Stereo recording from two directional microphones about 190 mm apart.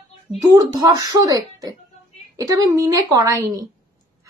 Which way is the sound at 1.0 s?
20° right (ahead or behind).